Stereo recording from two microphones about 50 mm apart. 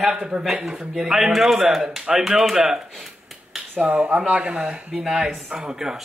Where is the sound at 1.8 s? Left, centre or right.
Centre.